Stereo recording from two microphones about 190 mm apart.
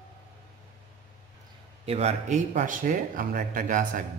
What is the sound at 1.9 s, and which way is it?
Speech, 35° right (ahead or behind).